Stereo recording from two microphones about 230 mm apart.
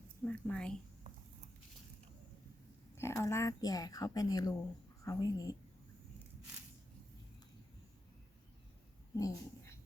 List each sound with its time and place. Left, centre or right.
0.3 s a woman's voice: centre
2.9 s speech: centre
9.1 s dog: centre